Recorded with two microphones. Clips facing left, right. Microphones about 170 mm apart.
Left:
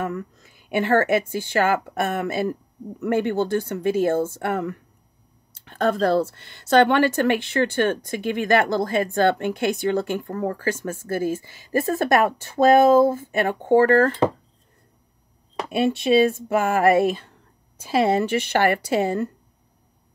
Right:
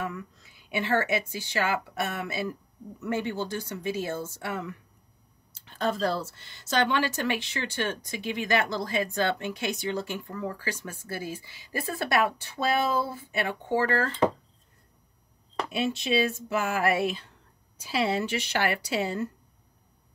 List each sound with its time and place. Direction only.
0.0 s speech: 50° left (ahead or behind)
15.7 s speech: 55° left (ahead or behind)